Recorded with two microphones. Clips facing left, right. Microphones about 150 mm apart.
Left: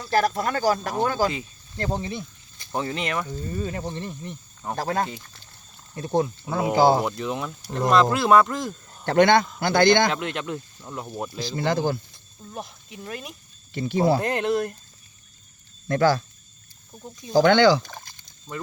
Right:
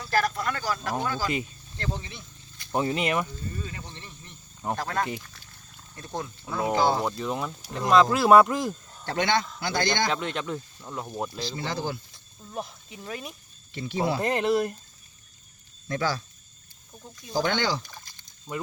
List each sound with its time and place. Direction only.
0.3 s speech: 40° left (ahead or behind)
2.7 s speech: 10° right (ahead or behind)
3.6 s cricket: 50° left (ahead or behind)
4.8 s speech: 35° left (ahead or behind)
7.0 s speech: centre (ahead or behind)
9.0 s a man's voice: 55° left (ahead or behind)
10.1 s speech: 5° left (ahead or behind)
11.5 s cricket: 55° left (ahead or behind)
12.1 s speech: centre (ahead or behind)
13.7 s cricket: 45° left (ahead or behind)
14.2 s speech: centre (ahead or behind)
15.9 s cricket: 55° left (ahead or behind)
17.3 s speech: 85° left; by 18.1 s 60° left (ahead or behind)